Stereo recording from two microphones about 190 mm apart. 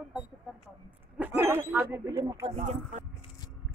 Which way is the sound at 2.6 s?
35° right (ahead or behind).